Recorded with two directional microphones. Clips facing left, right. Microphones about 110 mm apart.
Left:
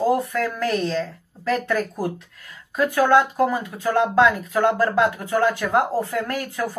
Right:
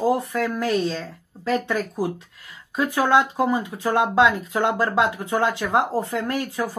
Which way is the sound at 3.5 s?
15° right (ahead or behind).